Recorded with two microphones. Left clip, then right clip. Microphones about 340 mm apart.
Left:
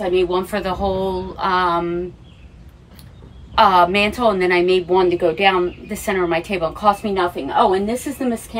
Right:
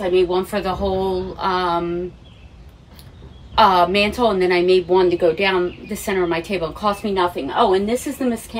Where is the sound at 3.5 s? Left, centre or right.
Centre.